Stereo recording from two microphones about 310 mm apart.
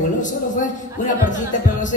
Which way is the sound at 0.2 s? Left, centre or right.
Left.